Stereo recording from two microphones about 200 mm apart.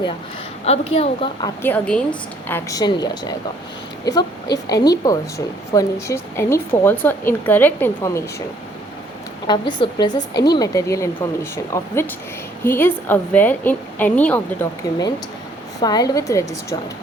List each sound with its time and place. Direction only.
0.6 s a woman's voice: 30° left (ahead or behind)
1.6 s speech: 5° left (ahead or behind)
2.5 s a woman's voice: 15° left (ahead or behind)
9.5 s a woman's voice: 20° left (ahead or behind)
15.8 s speech: 20° left (ahead or behind)